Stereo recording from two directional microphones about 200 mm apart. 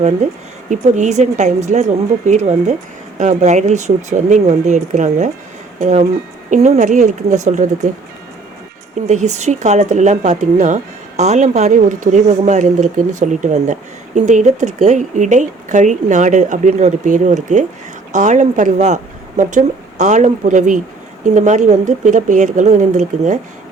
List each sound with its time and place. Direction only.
0.7 s speech: 35° right (ahead or behind)
9.0 s speech: 35° right (ahead or behind)